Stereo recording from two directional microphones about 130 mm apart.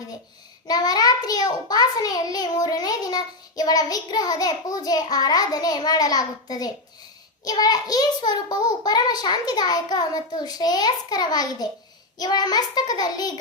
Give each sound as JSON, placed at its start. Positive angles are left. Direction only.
{"t": 0.7, "sound": "a child's voice", "side_deg": 30}